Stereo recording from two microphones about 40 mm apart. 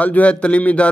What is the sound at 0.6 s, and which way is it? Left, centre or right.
Speech, left.